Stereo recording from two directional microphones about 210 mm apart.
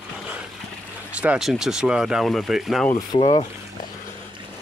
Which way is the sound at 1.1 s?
5° right (ahead or behind).